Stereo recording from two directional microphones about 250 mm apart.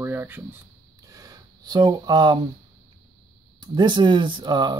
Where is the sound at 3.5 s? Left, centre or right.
Centre.